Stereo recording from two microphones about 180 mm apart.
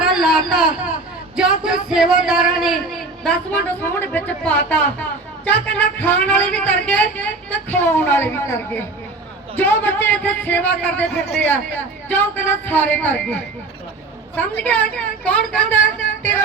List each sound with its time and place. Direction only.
0.0 s a sound: centre (ahead or behind)
1.4 s a man's voice: 5° right (ahead or behind)
11.1 s a man's voice: 65° left (ahead or behind)
11.4 s speech: 10° left (ahead or behind)